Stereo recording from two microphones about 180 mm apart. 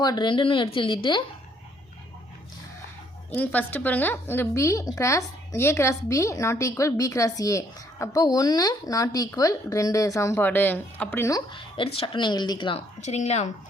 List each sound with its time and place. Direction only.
0.0 s a woman's voice: 25° left (ahead or behind)
3.3 s a woman's voice: 10° left (ahead or behind); by 13.5 s 40° left (ahead or behind)